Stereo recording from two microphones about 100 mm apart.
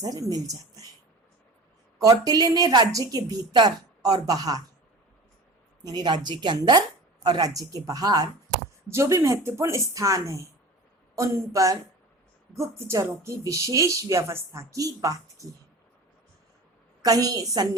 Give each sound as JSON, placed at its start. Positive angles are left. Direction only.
{"t": 0.0, "sound": "speech", "side_deg": -40}
{"t": 2.0, "sound": "speech", "side_deg": -40}
{"t": 5.8, "sound": "speech", "side_deg": -45}
{"t": 17.0, "sound": "speech", "side_deg": -35}